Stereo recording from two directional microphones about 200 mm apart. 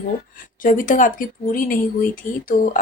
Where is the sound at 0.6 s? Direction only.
45° left (ahead or behind).